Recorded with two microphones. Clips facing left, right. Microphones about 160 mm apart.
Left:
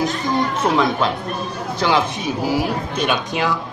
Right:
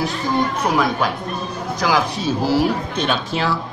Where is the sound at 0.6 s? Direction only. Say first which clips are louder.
Left 1 dB; 25° left (ahead or behind).